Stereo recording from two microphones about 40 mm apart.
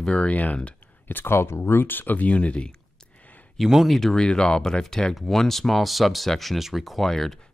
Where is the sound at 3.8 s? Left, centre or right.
Centre.